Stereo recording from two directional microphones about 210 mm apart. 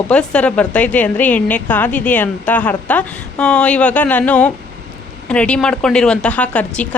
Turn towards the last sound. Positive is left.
turn(degrees=5)  # may be behind; listen again after turning